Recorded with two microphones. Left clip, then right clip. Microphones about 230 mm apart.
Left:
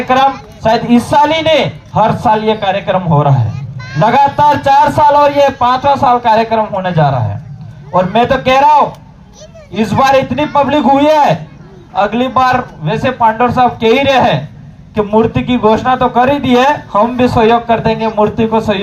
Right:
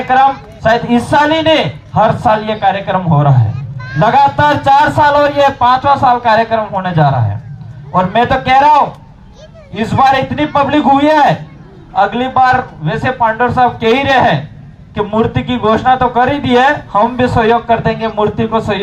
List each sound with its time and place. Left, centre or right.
0.1 s a man's voice: left